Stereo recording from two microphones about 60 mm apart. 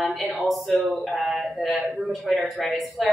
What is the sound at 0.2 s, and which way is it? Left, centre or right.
Speech, centre.